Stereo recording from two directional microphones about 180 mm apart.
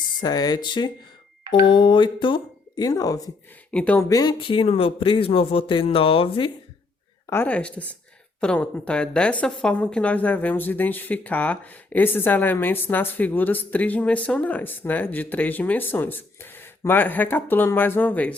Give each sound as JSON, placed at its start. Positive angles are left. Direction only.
{"t": 0.2, "sound": "speech", "side_deg": 20}
{"t": 3.7, "sound": "a woman's voice", "side_deg": 5}
{"t": 4.1, "sound": "speech", "side_deg": 20}
{"t": 7.3, "sound": "a woman's voice", "side_deg": 10}